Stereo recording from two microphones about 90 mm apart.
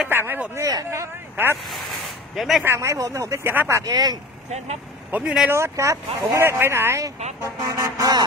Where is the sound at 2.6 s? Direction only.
30° right (ahead or behind).